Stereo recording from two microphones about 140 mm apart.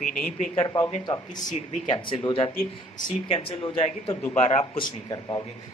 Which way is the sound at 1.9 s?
35° left (ahead or behind).